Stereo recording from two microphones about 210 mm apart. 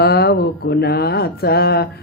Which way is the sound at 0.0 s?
50° left (ahead or behind).